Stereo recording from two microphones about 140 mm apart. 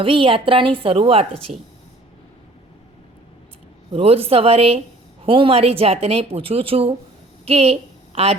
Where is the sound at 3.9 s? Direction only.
45° right (ahead or behind).